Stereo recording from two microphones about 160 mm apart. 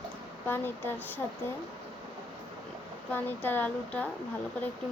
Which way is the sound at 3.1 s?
10° left (ahead or behind).